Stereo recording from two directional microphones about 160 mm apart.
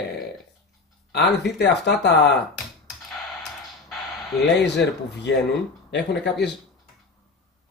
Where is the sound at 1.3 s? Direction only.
90° left.